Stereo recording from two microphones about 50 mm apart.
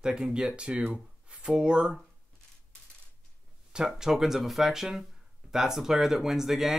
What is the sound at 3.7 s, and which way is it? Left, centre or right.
Speech, centre.